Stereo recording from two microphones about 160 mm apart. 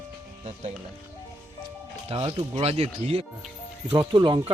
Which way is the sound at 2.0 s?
35° right (ahead or behind).